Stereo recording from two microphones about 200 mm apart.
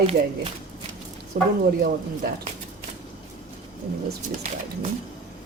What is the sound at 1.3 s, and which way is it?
A woman's voice, 50° right (ahead or behind).